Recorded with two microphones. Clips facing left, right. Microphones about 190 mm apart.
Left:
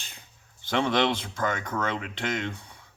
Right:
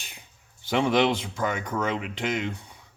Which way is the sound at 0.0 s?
15° right (ahead or behind).